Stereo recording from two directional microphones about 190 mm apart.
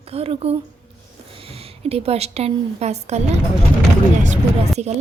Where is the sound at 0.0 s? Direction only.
30° right (ahead or behind).